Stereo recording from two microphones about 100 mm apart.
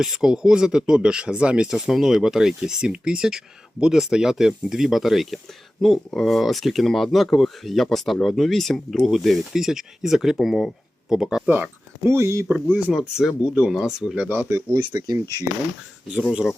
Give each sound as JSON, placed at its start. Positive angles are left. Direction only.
{"t": 0.0, "sound": "speech", "side_deg": -5}
{"t": 11.4, "sound": "speech", "side_deg": -20}
{"t": 12.9, "sound": "speech", "side_deg": 0}
{"t": 14.3, "sound": "speech", "side_deg": -20}
{"t": 14.9, "sound": "speech", "side_deg": -40}
{"t": 16.1, "sound": "speech", "side_deg": -10}